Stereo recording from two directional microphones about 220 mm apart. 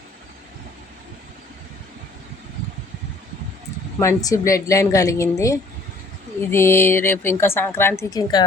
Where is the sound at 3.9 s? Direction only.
15° left (ahead or behind).